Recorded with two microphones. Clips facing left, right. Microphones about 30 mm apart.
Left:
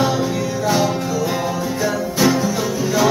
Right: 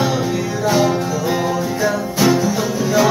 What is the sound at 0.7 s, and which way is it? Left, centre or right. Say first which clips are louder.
Music: right 3 dB; centre.